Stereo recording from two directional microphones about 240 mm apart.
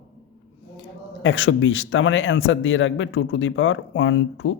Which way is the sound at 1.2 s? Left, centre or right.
Left.